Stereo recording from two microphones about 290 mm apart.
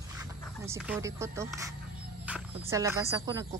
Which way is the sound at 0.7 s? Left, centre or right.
Centre.